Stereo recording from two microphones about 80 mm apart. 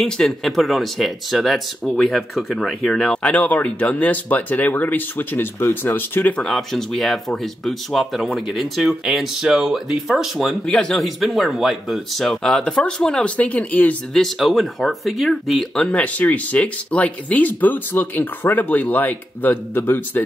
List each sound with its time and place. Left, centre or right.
0.0 s speech: centre; by 6.4 s left
6.4 s speech: centre
10.7 s speech: centre
14.1 s speech: centre
15.8 s speech: centre